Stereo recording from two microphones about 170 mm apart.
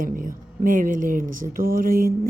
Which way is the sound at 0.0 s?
55° right (ahead or behind).